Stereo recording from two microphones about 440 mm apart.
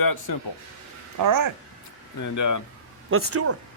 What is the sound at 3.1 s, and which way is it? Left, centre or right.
Speech, right.